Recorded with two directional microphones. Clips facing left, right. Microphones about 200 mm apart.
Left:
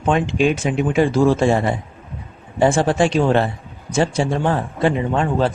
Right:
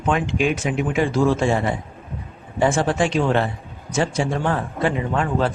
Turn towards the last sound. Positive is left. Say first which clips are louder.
# left 3 dB
turn(degrees=30)  # may be behind; listen again after turning